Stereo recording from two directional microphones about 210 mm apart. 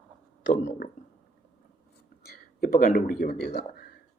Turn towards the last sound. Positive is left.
turn(degrees=50)  # may be behind; listen again after turning